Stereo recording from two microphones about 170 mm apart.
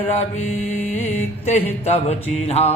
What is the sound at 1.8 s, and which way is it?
Speech, 40° left (ahead or behind).